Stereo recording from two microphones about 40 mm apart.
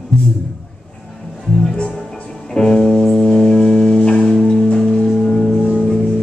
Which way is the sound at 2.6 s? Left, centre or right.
Centre.